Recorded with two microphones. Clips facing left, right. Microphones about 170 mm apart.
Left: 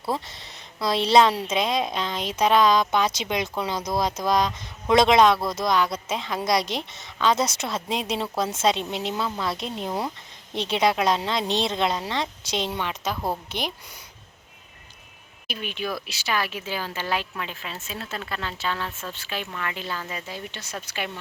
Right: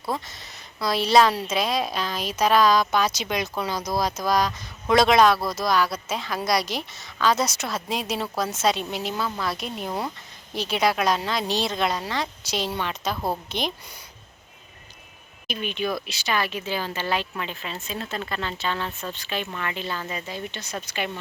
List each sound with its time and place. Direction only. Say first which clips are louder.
0.1 s a woman's voice: left 1 dB; 25° left (ahead or behind); by 13.7 s 10° left (ahead or behind)
15.4 s speech: right 3 dB; 5° left (ahead or behind)